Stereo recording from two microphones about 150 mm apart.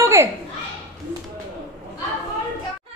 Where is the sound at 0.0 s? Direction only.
20° right (ahead or behind).